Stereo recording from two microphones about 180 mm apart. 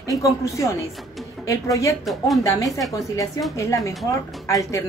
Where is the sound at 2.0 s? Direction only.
Centre (ahead or behind).